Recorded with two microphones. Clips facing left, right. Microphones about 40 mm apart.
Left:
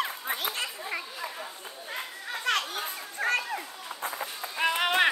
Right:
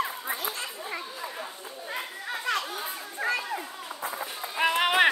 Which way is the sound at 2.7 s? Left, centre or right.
Left.